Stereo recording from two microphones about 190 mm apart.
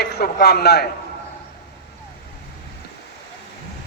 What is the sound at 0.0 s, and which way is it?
Speech, 55° left (ahead or behind).